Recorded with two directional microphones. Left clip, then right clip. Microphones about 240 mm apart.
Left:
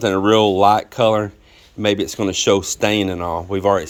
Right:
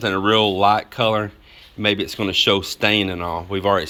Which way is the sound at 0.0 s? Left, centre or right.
Left.